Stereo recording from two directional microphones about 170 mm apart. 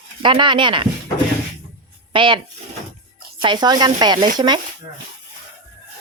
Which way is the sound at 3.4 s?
25° right (ahead or behind).